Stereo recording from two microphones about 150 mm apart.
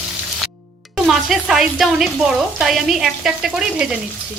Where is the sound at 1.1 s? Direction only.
Centre (ahead or behind).